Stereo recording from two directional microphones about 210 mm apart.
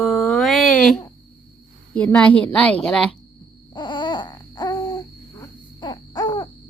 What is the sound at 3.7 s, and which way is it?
Babbling, 20° left (ahead or behind).